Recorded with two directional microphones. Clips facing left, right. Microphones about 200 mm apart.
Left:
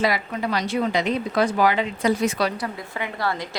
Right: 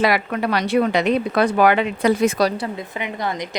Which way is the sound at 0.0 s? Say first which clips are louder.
Right 4 dB; 65° right (ahead or behind).